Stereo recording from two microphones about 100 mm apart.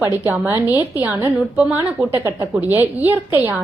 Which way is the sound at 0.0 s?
30° right (ahead or behind).